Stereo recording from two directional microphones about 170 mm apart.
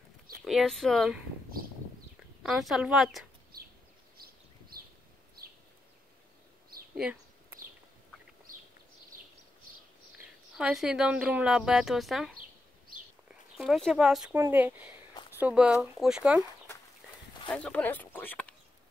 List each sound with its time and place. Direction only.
0.5 s speech: centre (ahead or behind)
2.4 s speech: centre (ahead or behind)
4.2 s a sound: 60° right (ahead or behind)
10.1 s speech: 5° right (ahead or behind)
13.6 s speech: centre (ahead or behind)
17.5 s speech: 5° left (ahead or behind)